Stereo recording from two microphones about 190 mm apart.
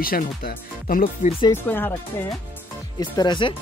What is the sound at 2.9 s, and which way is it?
Speech, 20° left (ahead or behind).